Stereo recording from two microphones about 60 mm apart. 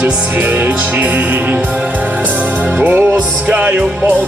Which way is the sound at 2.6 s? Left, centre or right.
Right.